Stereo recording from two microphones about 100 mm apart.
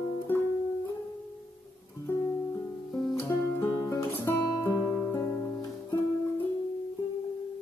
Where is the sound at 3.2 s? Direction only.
25° left (ahead or behind).